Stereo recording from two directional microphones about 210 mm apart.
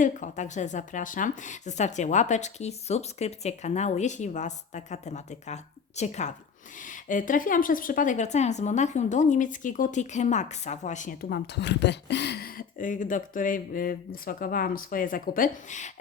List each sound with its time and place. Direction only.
0.0 s a woman's voice: 35° left (ahead or behind)